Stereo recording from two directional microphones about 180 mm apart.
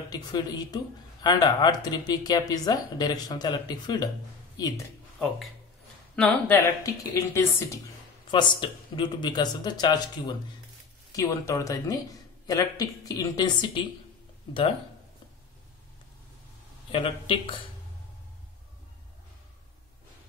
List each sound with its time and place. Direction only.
0.1 s speech: 20° left (ahead or behind)
6.1 s speech: 10° left (ahead or behind)
8.3 s speech: 25° left (ahead or behind)
16.9 s speech: 30° left (ahead or behind)